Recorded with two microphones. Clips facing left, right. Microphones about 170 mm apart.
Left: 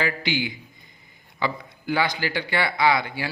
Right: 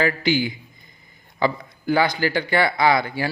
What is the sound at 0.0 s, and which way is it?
A man's voice, 45° right (ahead or behind).